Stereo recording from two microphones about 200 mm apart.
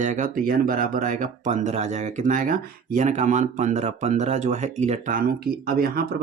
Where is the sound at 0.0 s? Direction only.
40° right (ahead or behind).